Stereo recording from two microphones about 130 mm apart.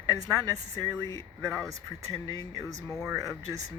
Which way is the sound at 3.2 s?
30° right (ahead or behind).